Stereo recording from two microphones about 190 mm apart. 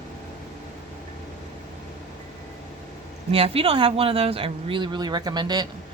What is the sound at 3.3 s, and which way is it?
A woman's voice, 30° right (ahead or behind).